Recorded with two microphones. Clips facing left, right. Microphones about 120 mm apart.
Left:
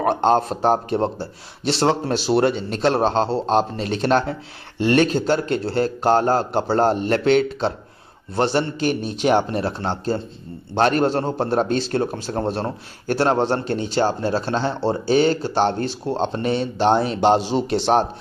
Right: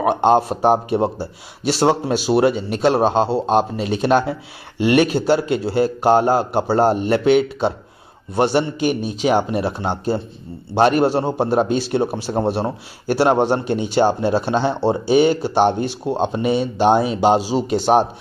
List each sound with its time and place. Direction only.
0.0 s a man's voice: 15° right (ahead or behind)